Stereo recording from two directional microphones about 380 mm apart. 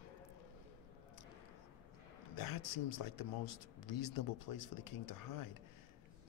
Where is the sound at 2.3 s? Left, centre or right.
Left.